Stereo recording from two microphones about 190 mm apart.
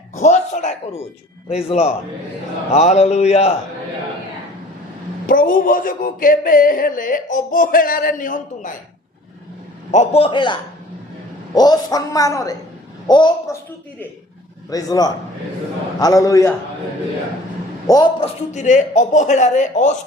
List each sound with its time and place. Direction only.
0.2 s a sound: 40° left (ahead or behind)
1.6 s a man's voice: 30° left (ahead or behind)
5.2 s speech: 45° left (ahead or behind)
9.9 s a woman's voice: 35° left (ahead or behind)
14.7 s a woman's voice: 20° left (ahead or behind)
17.8 s a man's voice: 20° left (ahead or behind); by 19.9 s 40° left (ahead or behind)